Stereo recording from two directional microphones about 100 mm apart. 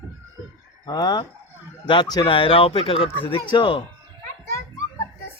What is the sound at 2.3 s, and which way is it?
Speech, 65° left (ahead or behind).